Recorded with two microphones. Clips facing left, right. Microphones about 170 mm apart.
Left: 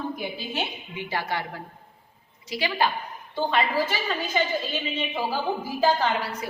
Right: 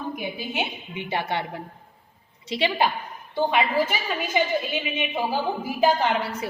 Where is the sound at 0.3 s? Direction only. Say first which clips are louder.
Right 2 dB; 20° right (ahead or behind).